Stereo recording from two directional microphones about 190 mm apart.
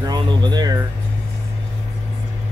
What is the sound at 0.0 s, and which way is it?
Music, 20° right (ahead or behind).